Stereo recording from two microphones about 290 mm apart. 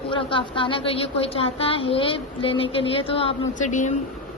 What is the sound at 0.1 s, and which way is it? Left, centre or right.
A woman's voice, centre.